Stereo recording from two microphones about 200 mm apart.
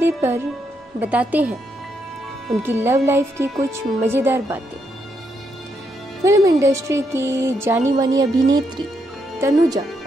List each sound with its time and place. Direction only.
0.0 s speech: 10° right (ahead or behind)
2.6 s speech: 10° right (ahead or behind)
6.2 s speech: 15° right (ahead or behind)